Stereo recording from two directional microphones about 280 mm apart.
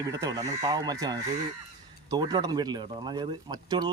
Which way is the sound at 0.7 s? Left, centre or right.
Centre.